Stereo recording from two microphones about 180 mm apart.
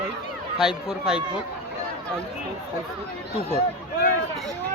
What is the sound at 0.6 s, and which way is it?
Speech, 5° right (ahead or behind).